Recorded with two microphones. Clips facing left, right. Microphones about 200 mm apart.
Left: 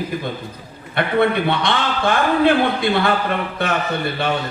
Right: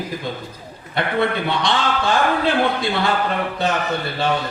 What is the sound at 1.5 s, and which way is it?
Speech, 55° left (ahead or behind).